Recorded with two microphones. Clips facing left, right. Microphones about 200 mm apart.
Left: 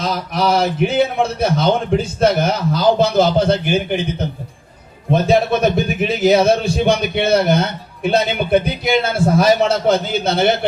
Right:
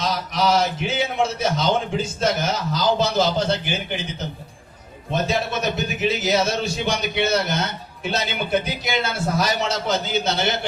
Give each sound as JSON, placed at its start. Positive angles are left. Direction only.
{"t": 0.0, "sound": "speech", "side_deg": 55}